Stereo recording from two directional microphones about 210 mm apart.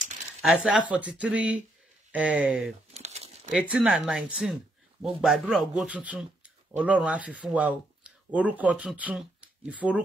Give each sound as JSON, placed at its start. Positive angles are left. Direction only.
{"t": 0.4, "sound": "speech", "side_deg": -5}
{"t": 2.9, "sound": "crumpling", "side_deg": -30}
{"t": 3.5, "sound": "speech", "side_deg": 0}